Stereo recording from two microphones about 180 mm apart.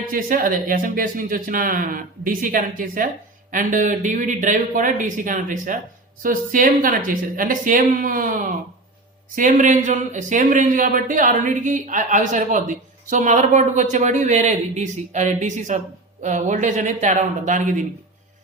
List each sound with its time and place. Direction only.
0.1 s speech: 50° right (ahead or behind)